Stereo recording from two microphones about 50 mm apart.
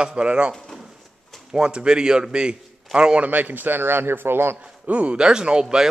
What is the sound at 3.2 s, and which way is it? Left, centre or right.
Speech, right.